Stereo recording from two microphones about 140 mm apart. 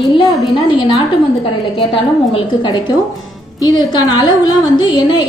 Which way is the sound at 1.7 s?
35° left (ahead or behind).